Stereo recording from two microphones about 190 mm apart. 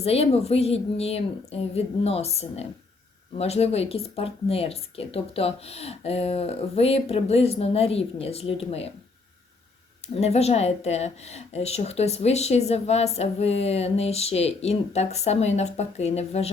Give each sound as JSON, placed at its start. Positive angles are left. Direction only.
{"t": 0.0, "sound": "a woman's voice", "side_deg": 30}
{"t": 10.2, "sound": "a woman's voice", "side_deg": 35}